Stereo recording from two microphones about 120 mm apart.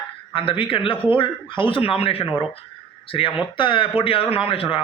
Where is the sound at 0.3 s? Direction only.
45° left (ahead or behind).